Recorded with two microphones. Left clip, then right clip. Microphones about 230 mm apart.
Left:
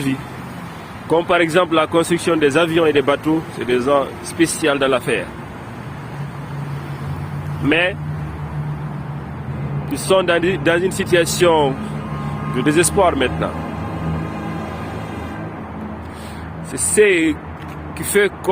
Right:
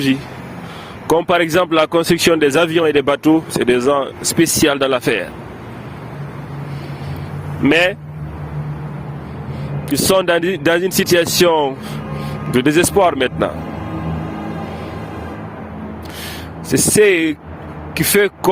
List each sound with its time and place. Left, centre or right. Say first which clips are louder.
1.0 s speech: right 1 dB; right
7.7 s speech: right 3 dB; right
9.9 s speech: right 2 dB; right
17.0 s speech: even; right